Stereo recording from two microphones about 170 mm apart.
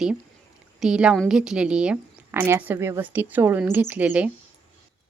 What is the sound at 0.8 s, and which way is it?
A woman's voice, 5° right (ahead or behind).